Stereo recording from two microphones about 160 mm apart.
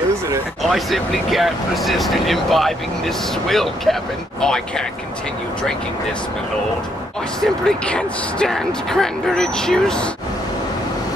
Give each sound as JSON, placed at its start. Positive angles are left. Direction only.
{"t": 0.6, "sound": "speech", "side_deg": 0}
{"t": 7.3, "sound": "speech", "side_deg": 5}